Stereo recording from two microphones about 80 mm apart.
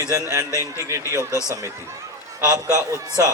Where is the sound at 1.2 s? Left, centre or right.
Left.